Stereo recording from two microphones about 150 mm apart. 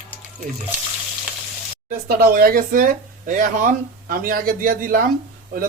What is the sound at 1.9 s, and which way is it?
Speech, 90° right.